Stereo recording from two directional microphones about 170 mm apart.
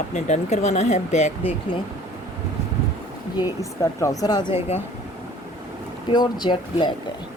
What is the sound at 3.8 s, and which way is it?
Speech, 20° left (ahead or behind).